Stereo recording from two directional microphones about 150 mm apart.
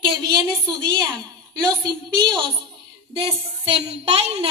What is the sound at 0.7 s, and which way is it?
A woman's voice, 30° right (ahead or behind).